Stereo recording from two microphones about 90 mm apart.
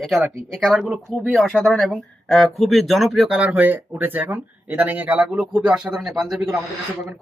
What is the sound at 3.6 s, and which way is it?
Speech, 25° right (ahead or behind).